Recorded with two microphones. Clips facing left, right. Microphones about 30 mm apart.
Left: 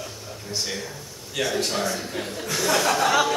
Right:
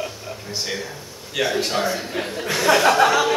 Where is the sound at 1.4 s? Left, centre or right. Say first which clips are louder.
Right 4 dB; centre.